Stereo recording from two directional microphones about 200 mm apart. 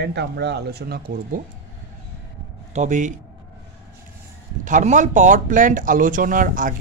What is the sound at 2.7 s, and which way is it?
Speech, 35° right (ahead or behind).